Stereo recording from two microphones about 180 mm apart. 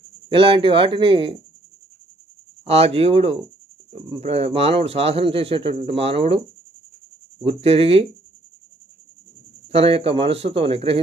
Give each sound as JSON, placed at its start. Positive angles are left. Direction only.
{"t": 0.3, "sound": "speech", "side_deg": -30}
{"t": 2.6, "sound": "speech", "side_deg": -35}
{"t": 7.4, "sound": "speech", "side_deg": -35}
{"t": 9.6, "sound": "speech", "side_deg": -35}